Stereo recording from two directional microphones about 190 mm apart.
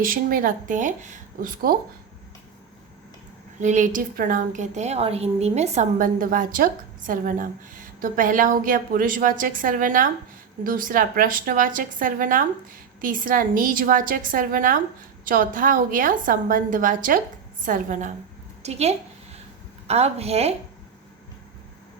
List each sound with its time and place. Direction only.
0.0 s a woman's voice: 45° right (ahead or behind)
3.6 s a woman's voice: 40° right (ahead or behind)